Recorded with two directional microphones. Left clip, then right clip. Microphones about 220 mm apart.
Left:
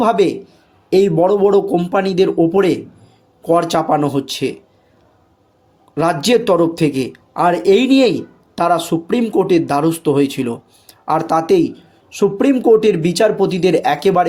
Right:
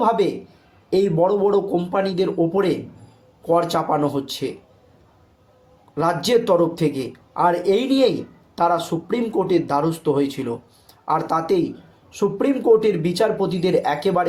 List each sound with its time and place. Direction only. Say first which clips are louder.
0.0 s speech: left 5 dB; 35° left (ahead or behind)
5.9 s speech: left 4 dB; 40° left (ahead or behind)